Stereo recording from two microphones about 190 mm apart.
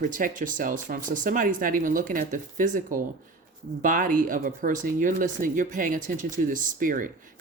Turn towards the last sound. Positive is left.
turn(degrees=-45)  # may be behind; listen again after turning